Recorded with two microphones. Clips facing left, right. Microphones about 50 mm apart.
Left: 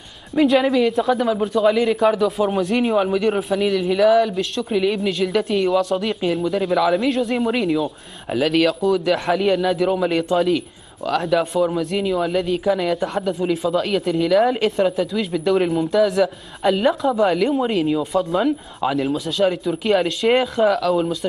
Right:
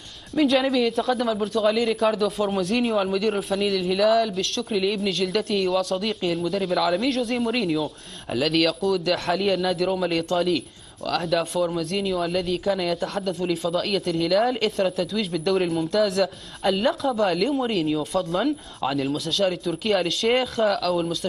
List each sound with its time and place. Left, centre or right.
0.3 s speech: centre